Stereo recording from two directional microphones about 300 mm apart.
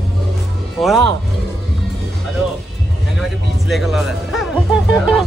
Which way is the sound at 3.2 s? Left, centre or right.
Centre.